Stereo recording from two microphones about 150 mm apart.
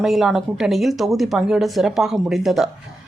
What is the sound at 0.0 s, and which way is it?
A woman's voice, centre (ahead or behind).